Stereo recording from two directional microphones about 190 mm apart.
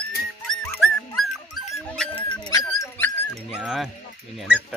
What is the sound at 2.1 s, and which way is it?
Dog, 25° left (ahead or behind).